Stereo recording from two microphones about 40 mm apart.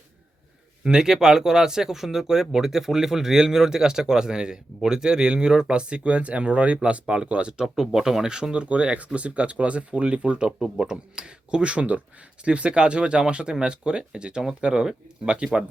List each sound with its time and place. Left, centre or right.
0.9 s speech: centre
7.9 s speech: centre; by 10.5 s right
10.6 s speech: centre